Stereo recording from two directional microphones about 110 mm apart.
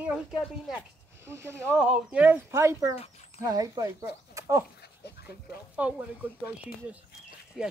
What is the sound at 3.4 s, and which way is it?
Speech, 35° right (ahead or behind).